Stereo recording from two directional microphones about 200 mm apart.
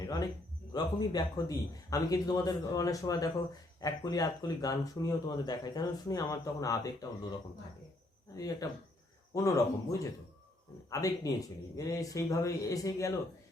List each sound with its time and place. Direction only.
0.0 s a sound: 20° left (ahead or behind)
0.7 s speech: 20° left (ahead or behind)
8.4 s speech: 20° left (ahead or behind)